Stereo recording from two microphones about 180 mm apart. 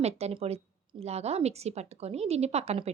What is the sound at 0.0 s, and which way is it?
Speech, 35° right (ahead or behind).